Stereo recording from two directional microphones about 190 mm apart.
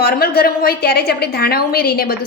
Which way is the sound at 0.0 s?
55° left (ahead or behind).